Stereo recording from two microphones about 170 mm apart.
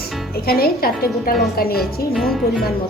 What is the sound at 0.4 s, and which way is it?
A woman's voice, 60° left (ahead or behind).